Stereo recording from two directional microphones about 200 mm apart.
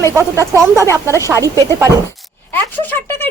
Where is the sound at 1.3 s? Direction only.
15° right (ahead or behind).